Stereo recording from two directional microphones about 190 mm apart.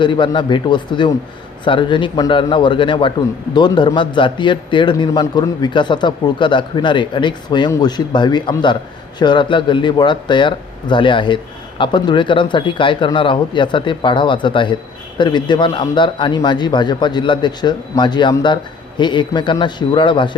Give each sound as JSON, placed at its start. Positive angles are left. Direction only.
{"t": 0.0, "sound": "a man's voice", "side_deg": 25}